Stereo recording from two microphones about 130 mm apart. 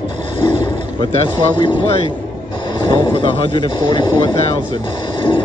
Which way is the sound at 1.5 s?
40° left (ahead or behind).